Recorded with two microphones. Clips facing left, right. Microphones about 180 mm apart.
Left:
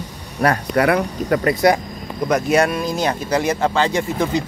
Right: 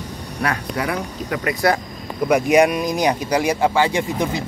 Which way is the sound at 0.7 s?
65° left (ahead or behind).